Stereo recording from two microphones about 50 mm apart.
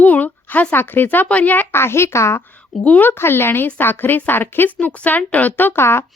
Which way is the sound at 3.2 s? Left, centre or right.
Left.